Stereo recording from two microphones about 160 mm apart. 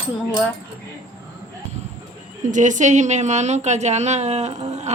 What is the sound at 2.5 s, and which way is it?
A woman's voice, 50° right (ahead or behind).